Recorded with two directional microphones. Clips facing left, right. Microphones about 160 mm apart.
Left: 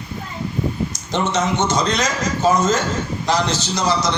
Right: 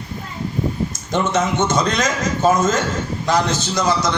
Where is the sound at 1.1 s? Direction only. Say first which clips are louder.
Right 1 dB; 50° right (ahead or behind).